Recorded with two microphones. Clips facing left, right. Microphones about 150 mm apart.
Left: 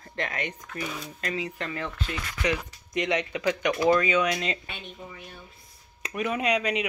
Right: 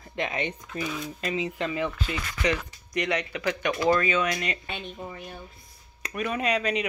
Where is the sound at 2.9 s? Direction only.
25° left (ahead or behind).